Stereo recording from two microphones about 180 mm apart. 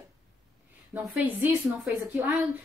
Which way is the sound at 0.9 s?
10° right (ahead or behind).